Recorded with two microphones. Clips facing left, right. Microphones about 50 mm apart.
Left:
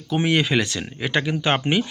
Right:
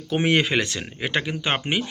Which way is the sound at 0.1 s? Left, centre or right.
Right.